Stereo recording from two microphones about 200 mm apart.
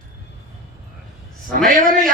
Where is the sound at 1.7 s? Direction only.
45° right (ahead or behind).